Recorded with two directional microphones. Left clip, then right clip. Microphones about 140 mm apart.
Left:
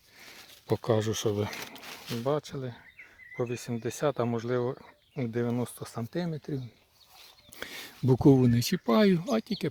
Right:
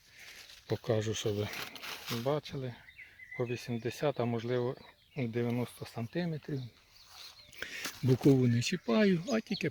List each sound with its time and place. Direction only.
0.7 s speech: 50° left (ahead or behind)
2.2 s speech: 40° left (ahead or behind)